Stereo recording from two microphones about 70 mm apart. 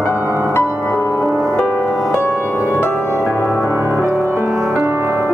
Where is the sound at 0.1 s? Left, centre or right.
Right.